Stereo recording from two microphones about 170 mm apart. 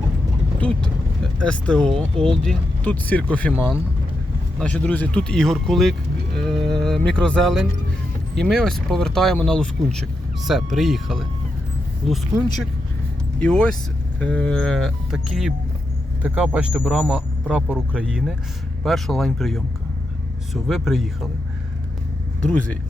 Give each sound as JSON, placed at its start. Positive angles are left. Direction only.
{"t": 0.6, "sound": "speech", "side_deg": 5}
{"t": 4.6, "sound": "speech", "side_deg": 10}
{"t": 13.4, "sound": "a man's voice", "side_deg": 5}
{"t": 22.4, "sound": "speech", "side_deg": 10}